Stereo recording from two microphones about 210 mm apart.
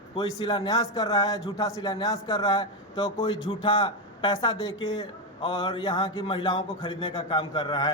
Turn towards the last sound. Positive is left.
turn(degrees=25)  # may be behind; listen again after turning